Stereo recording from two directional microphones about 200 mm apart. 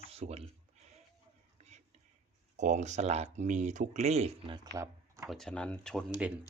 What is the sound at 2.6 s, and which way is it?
Speech, 35° right (ahead or behind).